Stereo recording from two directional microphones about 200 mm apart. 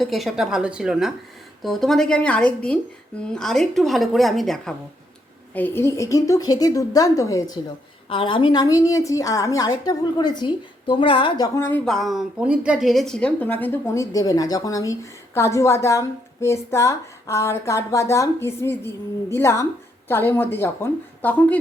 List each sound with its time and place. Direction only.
0.0 s a woman's voice: centre (ahead or behind)